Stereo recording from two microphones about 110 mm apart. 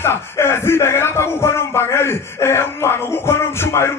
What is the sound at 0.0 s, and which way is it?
Speech, 20° left (ahead or behind).